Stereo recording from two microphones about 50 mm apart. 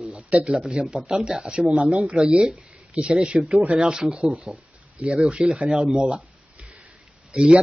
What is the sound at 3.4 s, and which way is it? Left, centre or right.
Speech, centre.